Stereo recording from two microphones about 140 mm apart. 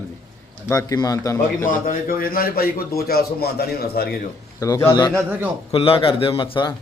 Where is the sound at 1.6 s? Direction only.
80° left.